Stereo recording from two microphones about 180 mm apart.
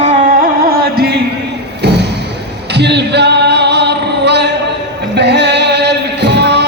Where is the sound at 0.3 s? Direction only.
55° right (ahead or behind).